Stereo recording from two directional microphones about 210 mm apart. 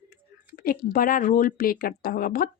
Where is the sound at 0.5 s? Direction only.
45° left (ahead or behind).